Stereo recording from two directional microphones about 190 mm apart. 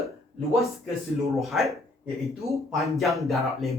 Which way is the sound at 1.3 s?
Centre (ahead or behind).